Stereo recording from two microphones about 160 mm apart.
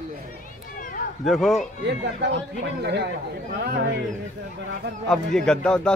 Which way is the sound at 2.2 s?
90° right.